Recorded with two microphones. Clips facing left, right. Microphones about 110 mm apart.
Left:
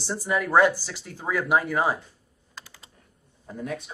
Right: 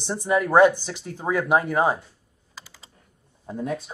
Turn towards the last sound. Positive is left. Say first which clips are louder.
# right 4 dB
turn(degrees=-25)  # may be behind; listen again after turning